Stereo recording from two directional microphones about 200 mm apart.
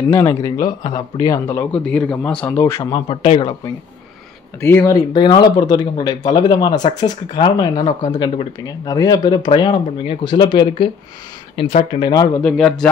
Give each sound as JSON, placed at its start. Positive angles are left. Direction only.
{"t": 0.1, "sound": "a man's voice", "side_deg": 15}
{"t": 2.6, "sound": "speech", "side_deg": 15}
{"t": 4.6, "sound": "speech", "side_deg": 10}
{"t": 12.4, "sound": "a man's voice", "side_deg": 5}